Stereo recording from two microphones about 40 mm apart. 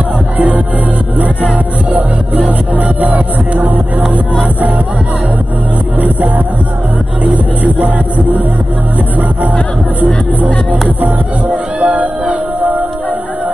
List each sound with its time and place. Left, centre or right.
1.9 s music: right
5.9 s music: right
10.4 s music: right